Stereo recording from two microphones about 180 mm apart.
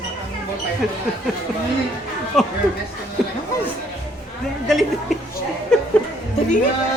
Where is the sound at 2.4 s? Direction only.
Centre (ahead or behind).